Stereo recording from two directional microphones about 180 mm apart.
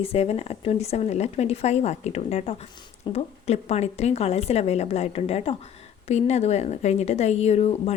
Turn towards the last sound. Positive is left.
turn(degrees=35)  # may be behind; listen again after turning